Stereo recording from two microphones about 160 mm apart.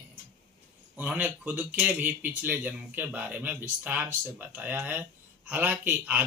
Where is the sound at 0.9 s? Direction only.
10° right (ahead or behind).